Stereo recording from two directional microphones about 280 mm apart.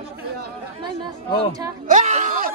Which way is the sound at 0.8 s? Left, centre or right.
Centre.